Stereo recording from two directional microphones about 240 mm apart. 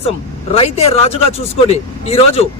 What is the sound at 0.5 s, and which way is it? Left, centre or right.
A man's voice, left.